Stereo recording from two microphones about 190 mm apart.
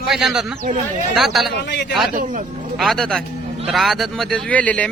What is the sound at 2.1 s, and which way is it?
Speech, 45° right (ahead or behind).